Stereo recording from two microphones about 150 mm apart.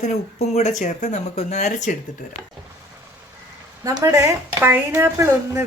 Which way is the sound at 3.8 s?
25° right (ahead or behind).